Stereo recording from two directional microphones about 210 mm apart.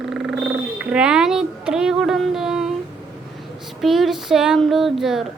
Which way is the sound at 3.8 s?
Centre (ahead or behind).